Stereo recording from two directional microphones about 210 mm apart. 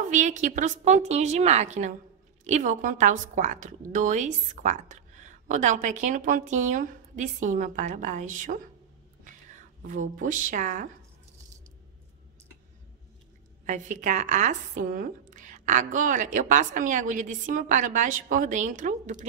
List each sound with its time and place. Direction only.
0.1 s a woman's voice: 35° right (ahead or behind)
13.7 s a woman's voice: 35° right (ahead or behind)